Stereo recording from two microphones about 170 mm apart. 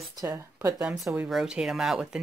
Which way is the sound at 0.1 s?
20° right (ahead or behind).